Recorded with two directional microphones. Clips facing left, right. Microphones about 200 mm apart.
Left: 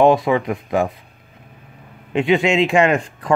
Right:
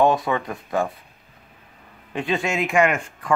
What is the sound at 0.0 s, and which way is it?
Speech, 20° left (ahead or behind).